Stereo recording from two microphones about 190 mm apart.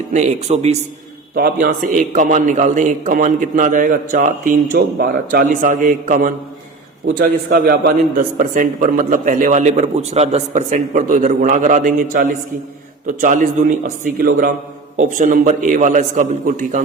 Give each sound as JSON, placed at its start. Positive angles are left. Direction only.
{"t": 0.1, "sound": "a man's voice", "side_deg": -35}
{"t": 1.4, "sound": "a man's voice", "side_deg": -50}